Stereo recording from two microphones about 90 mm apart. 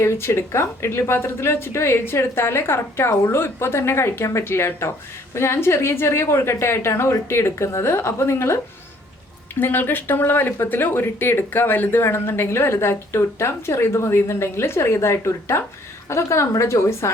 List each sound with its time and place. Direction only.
0.0 s speech: 30° left (ahead or behind)
9.6 s a woman's voice: 25° left (ahead or behind)